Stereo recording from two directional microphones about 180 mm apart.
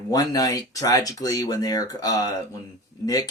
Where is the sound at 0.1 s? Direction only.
20° left (ahead or behind).